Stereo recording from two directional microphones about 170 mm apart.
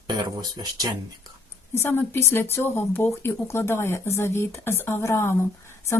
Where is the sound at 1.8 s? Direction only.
15° left (ahead or behind).